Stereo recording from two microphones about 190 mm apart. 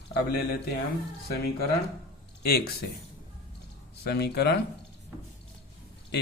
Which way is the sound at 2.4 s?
55° left (ahead or behind).